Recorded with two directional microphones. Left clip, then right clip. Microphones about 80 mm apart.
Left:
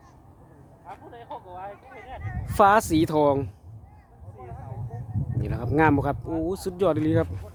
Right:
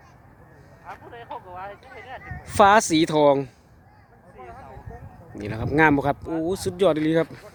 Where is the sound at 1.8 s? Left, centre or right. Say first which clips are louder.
Right 2 dB; centre.